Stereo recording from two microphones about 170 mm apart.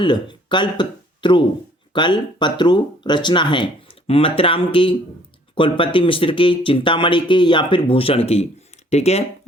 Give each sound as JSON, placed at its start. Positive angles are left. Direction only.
{"t": 0.0, "sound": "speech", "side_deg": 25}